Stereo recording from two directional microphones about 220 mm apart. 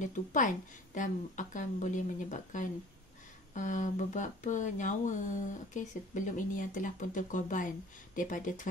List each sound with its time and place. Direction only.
0.0 s speech: 35° left (ahead or behind)